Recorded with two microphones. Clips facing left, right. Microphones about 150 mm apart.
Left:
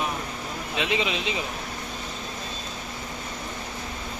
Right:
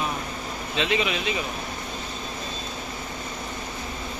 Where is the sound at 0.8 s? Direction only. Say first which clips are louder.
Right 2 dB; 20° left (ahead or behind).